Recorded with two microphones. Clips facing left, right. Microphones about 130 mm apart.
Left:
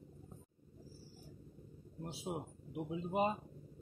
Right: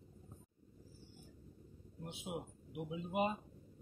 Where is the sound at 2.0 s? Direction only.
35° left (ahead or behind).